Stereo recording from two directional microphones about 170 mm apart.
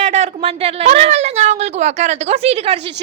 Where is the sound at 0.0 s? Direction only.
40° right (ahead or behind).